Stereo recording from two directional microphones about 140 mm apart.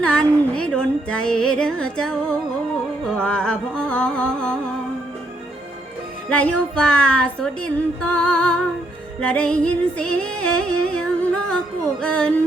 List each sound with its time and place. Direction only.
0.0 s music: 5° left (ahead or behind)
3.2 s a woman's voice: 5° left (ahead or behind)
6.2 s a woman's voice: 10° left (ahead or behind)